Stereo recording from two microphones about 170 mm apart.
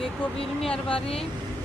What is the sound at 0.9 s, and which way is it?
Speech, 35° left (ahead or behind).